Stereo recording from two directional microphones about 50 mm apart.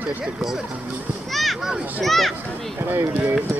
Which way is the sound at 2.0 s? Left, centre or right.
Centre.